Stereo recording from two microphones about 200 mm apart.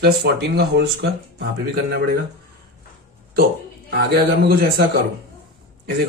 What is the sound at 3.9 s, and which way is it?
Speech, 50° right (ahead or behind).